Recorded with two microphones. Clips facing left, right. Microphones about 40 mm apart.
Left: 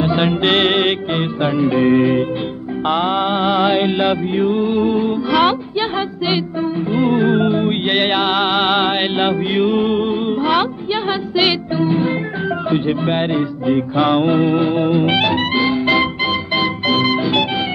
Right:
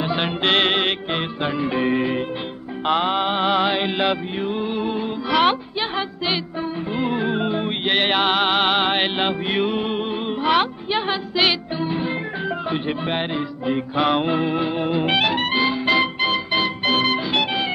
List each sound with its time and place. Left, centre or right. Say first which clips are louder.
0.2 s music: left 2 dB; centre
1.6 s music: left 8 dB; centre